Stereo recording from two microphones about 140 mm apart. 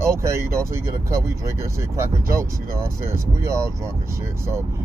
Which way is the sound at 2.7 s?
20° right (ahead or behind).